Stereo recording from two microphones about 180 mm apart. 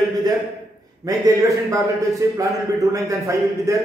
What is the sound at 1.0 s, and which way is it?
Speech, 20° right (ahead or behind).